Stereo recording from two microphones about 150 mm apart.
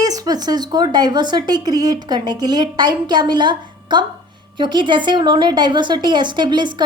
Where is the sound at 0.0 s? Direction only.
25° right (ahead or behind).